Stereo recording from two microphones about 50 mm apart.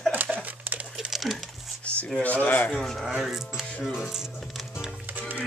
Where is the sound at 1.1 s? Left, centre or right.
Centre.